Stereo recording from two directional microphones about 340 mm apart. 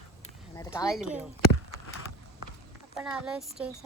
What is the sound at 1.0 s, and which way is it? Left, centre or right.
Speech, centre.